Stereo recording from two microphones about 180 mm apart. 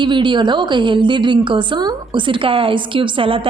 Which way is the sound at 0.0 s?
25° right (ahead or behind).